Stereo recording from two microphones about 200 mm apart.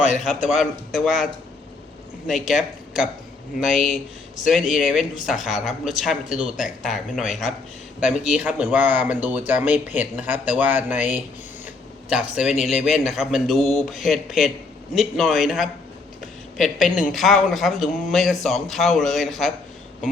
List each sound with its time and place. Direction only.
0.3 s a man's voice: 40° left (ahead or behind)
0.6 s speech: centre (ahead or behind)
11.6 s a sound: 5° right (ahead or behind)
12.6 s speech: centre (ahead or behind)